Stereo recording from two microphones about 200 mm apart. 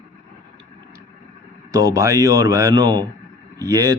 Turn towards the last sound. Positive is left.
turn(degrees=-15)  # may be behind; listen again after turning